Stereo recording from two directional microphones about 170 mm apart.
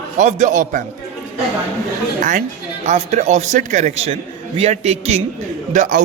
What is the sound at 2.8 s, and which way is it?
A man's voice, 45° right (ahead or behind).